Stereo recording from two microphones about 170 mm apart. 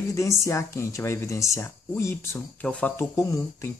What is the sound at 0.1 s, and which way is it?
Speech, 15° left (ahead or behind).